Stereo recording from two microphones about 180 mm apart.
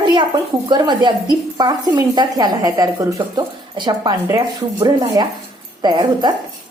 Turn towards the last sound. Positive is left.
turn(degrees=-25)  # may be behind; listen again after turning